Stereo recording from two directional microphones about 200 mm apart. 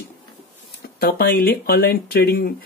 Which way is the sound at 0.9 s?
50° left (ahead or behind).